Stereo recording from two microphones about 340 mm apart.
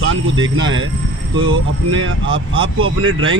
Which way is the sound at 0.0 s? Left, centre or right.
Right.